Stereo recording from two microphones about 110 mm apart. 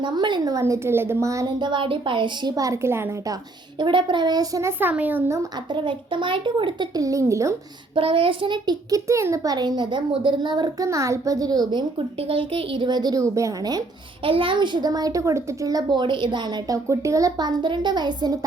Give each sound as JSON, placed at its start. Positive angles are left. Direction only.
{"t": 0.0, "sound": "a child's voice", "side_deg": -45}
{"t": 0.6, "sound": "a woman's voice", "side_deg": -20}
{"t": 1.5, "sound": "a child's voice", "side_deg": -45}
{"t": 2.6, "sound": "a woman's voice", "side_deg": -25}
{"t": 3.8, "sound": "a child's voice", "side_deg": -45}
{"t": 4.6, "sound": "a child's voice", "side_deg": -15}
{"t": 5.7, "sound": "a child's voice", "side_deg": -45}
{"t": 7.9, "sound": "a child's voice", "side_deg": -55}
{"t": 9.0, "sound": "a child's voice", "side_deg": -30}
{"t": 10.8, "sound": "a child's voice", "side_deg": -25}
{"t": 14.3, "sound": "a child's voice", "side_deg": -55}
{"t": 16.7, "sound": "a child's voice", "side_deg": -30}